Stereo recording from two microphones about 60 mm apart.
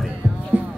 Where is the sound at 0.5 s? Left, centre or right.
Right.